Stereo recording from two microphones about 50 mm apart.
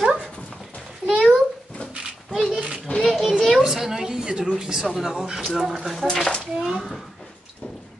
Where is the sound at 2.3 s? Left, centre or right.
Centre.